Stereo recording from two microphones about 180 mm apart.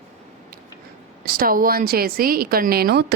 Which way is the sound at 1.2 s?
55° right (ahead or behind).